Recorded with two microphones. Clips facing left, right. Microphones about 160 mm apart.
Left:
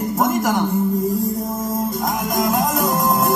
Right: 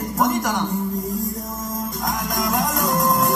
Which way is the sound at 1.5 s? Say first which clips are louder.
Left 6 dB; 30° left (ahead or behind).